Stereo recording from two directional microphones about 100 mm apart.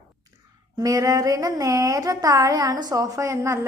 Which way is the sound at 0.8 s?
35° right (ahead or behind).